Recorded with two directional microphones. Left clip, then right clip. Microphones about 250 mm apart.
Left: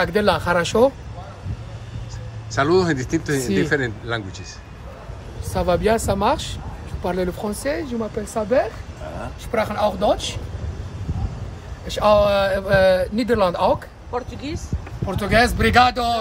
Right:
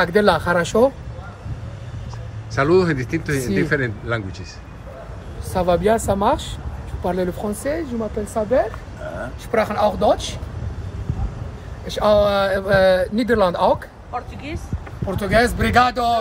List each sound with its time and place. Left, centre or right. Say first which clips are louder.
0.0 s speech: right 3 dB; centre
2.5 s speech: right 1 dB; centre
5.5 s speech: right 2 dB; centre
11.9 s speech: even; centre
14.1 s speech: left 2 dB; left
15.0 s speech: even; centre